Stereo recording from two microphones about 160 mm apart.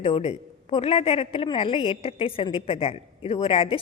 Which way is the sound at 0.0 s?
35° left (ahead or behind).